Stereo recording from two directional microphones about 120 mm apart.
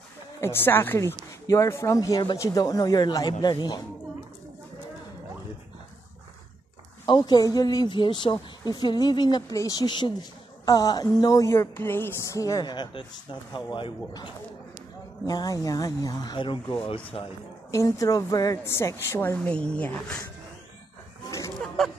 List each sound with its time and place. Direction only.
0.4 s speech: 20° left (ahead or behind); by 3.8 s 35° left (ahead or behind)
7.1 s a man's voice: 35° left (ahead or behind)
15.2 s a man's voice: 30° left (ahead or behind); by 17.3 s 50° left (ahead or behind)
17.6 s speech: 25° left (ahead or behind); by 20.2 s 10° left (ahead or behind)